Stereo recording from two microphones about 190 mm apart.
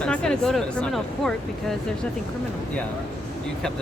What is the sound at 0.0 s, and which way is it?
Speech, 5° left (ahead or behind).